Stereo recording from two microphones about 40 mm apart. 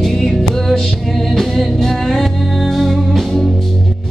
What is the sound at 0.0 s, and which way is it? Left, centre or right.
Music, centre.